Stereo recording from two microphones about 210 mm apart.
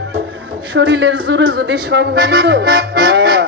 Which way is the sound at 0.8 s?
60° right (ahead or behind).